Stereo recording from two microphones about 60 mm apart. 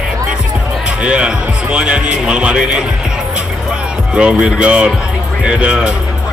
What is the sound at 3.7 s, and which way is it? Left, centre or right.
Music, centre.